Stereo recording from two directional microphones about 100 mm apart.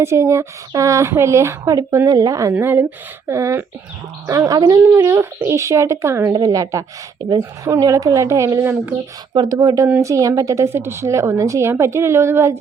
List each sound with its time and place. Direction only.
0.0 s a woman's voice: 25° right (ahead or behind)
4.9 s a woman's voice: 25° right (ahead or behind)
9.3 s speech: 50° right (ahead or behind)
9.6 s a woman's voice: 35° right (ahead or behind)